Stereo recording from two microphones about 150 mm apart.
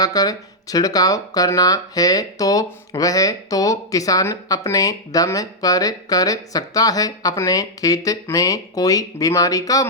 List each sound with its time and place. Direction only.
0.0 s speech: 25° left (ahead or behind)